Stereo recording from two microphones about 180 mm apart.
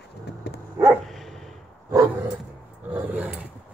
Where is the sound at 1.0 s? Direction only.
Centre (ahead or behind).